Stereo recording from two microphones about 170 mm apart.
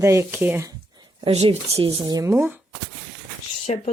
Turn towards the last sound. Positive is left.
turn(degrees=35)  # may be behind; listen again after turning